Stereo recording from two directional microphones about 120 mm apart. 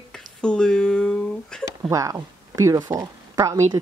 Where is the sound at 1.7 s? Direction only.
25° right (ahead or behind).